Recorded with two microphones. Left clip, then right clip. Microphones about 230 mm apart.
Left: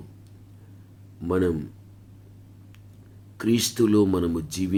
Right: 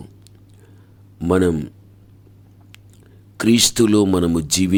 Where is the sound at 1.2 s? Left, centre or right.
Right.